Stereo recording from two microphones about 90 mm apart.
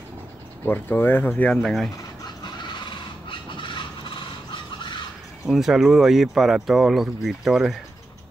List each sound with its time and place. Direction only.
0.7 s speech: 20° left (ahead or behind)
1.6 s speech: 5° left (ahead or behind)
2.4 s a sound: 65° left (ahead or behind)
5.5 s speech: 5° right (ahead or behind)